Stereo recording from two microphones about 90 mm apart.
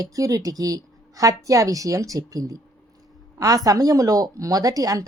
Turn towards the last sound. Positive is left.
turn(degrees=-40)  # may be behind; listen again after turning